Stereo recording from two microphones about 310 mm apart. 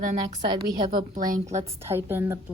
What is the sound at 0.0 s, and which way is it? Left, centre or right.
Speech, right.